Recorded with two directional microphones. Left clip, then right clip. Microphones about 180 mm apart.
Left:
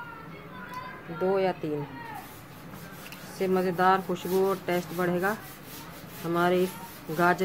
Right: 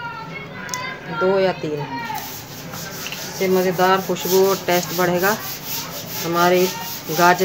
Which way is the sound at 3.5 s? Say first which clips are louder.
Right 7 dB; 35° left (ahead or behind).